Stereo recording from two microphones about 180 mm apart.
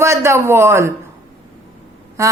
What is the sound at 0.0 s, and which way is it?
Speech, 15° right (ahead or behind).